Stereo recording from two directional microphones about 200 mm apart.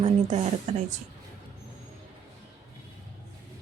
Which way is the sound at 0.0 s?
35° right (ahead or behind).